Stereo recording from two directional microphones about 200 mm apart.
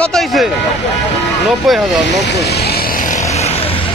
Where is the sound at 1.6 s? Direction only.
Centre (ahead or behind).